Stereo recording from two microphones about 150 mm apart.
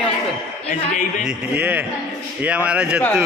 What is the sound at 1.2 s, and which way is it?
Speech, 10° right (ahead or behind).